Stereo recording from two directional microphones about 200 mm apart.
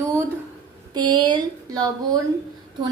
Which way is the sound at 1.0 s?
20° right (ahead or behind).